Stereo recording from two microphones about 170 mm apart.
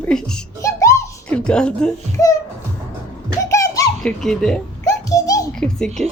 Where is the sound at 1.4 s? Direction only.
5° left (ahead or behind).